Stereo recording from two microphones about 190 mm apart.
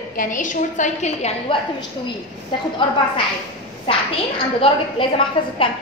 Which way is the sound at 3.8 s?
30° left (ahead or behind).